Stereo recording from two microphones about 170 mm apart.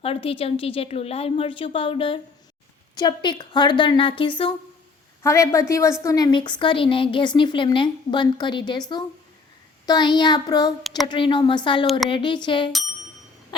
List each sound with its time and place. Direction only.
0.0 s a woman's voice: 35° left (ahead or behind)
5.2 s a woman's voice: 15° left (ahead or behind)
9.8 s a woman's voice: 25° left (ahead or behind)